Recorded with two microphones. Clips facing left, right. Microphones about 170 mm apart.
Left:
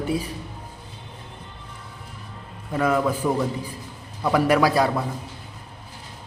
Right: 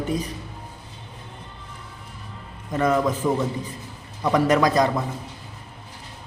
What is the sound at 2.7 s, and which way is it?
A man's voice, 5° left (ahead or behind).